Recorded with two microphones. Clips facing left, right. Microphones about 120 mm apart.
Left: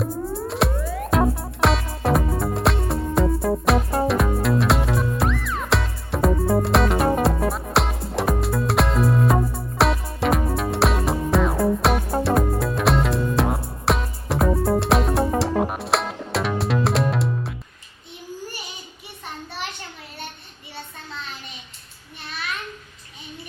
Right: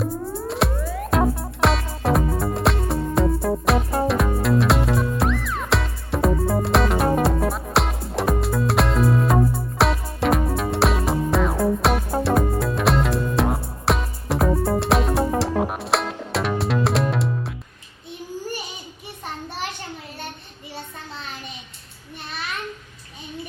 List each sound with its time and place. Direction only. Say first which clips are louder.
0.0 s music: even; centre (ahead or behind)